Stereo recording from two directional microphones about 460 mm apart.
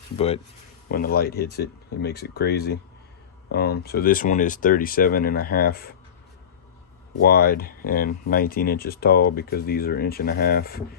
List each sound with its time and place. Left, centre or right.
0.9 s speech: centre
7.2 s speech: centre